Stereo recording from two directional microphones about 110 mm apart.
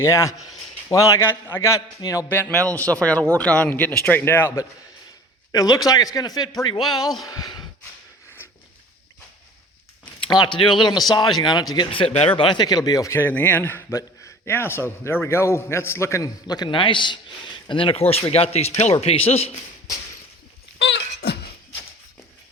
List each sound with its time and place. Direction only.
0.0 s a man's voice: 25° left (ahead or behind)
2.5 s speech: 10° left (ahead or behind)
4.2 s a man's voice: 20° left (ahead or behind)
5.5 s a man's voice: 35° left (ahead or behind)
10.2 s speech: 45° left (ahead or behind)
11.9 s speech: 55° left (ahead or behind)
12.4 s a man's voice: 45° left (ahead or behind)
13.1 s a man's voice: 20° left (ahead or behind)
16.5 s a man's voice: 45° left (ahead or behind); by 19.5 s 70° left (ahead or behind)